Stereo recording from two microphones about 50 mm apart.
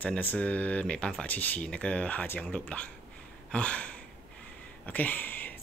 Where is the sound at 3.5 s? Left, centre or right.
Left.